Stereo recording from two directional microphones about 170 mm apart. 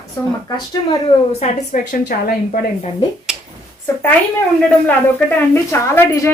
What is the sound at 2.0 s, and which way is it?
Speech, 60° left (ahead or behind).